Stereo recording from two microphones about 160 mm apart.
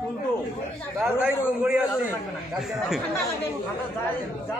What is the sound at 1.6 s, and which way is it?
Speech, 5° right (ahead or behind).